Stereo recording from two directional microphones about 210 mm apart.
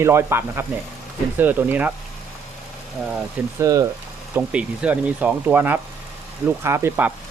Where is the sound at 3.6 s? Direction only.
15° right (ahead or behind).